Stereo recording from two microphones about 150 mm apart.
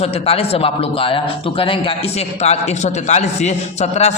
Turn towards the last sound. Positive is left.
turn(degrees=50)  # may be behind; listen again after turning